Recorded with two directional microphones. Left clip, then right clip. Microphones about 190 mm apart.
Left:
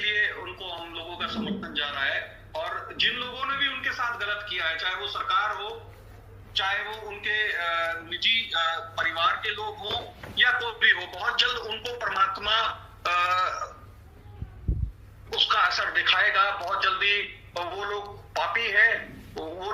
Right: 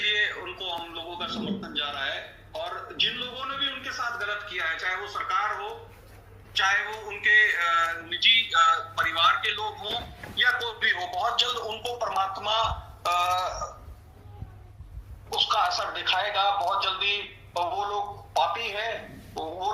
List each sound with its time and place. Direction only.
0.0 s a sound: 20° left (ahead or behind)
3.5 s a sound: 45° left (ahead or behind)
3.8 s music: 10° left (ahead or behind)
5.0 s speech: 10° left (ahead or behind)
6.6 s speech: 15° left (ahead or behind)
8.7 s a man's voice: centre (ahead or behind)
15.3 s a man's voice: 5° right (ahead or behind)